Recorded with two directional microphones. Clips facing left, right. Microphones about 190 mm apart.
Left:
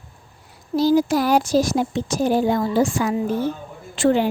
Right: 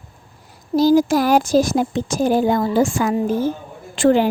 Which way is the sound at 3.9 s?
90° right.